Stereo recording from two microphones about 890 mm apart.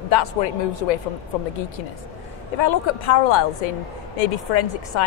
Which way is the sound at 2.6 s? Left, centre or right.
Left.